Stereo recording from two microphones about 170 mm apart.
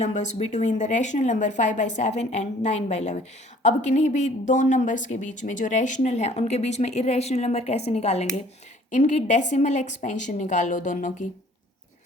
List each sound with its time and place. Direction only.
0.0 s speech: 45° left (ahead or behind)